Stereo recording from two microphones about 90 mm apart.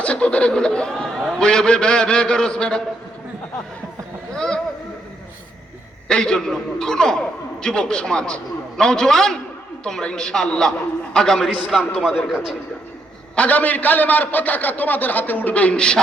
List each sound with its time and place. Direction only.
0.0 s a man's voice: 15° left (ahead or behind)
4.4 s a sound: 10° left (ahead or behind)
6.1 s a man's voice: 10° left (ahead or behind)
11.9 s a man's voice: 5° right (ahead or behind)
13.3 s a man's voice: 15° left (ahead or behind)